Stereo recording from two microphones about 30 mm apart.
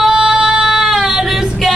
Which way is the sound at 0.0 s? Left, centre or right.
Centre.